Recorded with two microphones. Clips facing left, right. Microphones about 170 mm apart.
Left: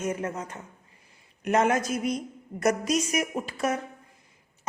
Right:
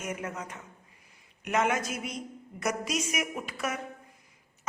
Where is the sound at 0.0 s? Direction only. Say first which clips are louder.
Left 6 dB; 30° left (ahead or behind).